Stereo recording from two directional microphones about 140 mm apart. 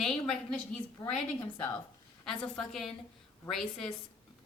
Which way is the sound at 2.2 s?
5° left (ahead or behind).